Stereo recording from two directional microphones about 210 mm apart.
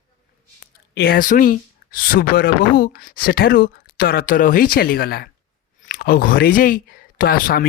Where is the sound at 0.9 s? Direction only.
45° left (ahead or behind).